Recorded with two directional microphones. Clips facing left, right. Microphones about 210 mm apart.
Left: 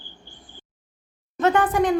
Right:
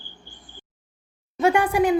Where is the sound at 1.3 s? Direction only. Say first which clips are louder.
Even; 10° right (ahead or behind).